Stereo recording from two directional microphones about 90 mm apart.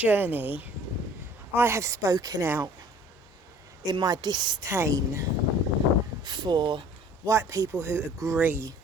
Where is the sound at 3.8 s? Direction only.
45° right (ahead or behind).